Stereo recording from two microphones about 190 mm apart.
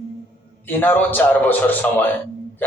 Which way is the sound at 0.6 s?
10° left (ahead or behind).